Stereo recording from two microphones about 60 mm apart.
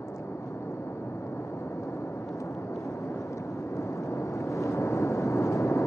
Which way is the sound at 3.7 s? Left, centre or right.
Left.